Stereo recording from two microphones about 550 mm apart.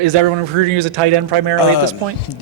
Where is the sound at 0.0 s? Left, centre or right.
Right.